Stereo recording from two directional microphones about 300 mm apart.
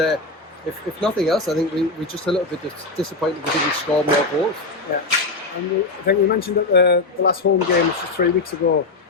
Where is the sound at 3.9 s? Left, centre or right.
Centre.